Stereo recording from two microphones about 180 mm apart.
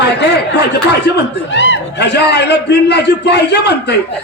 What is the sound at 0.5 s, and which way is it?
A man's voice, 65° left (ahead or behind).